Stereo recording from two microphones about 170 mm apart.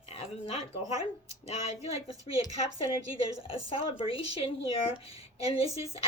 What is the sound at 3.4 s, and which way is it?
A woman's voice, 30° left (ahead or behind).